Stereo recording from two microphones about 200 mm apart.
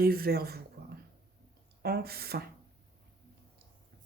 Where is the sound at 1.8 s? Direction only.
50° right (ahead or behind).